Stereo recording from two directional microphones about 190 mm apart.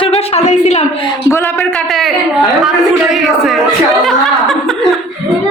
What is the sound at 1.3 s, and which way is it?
Speech, 15° left (ahead or behind).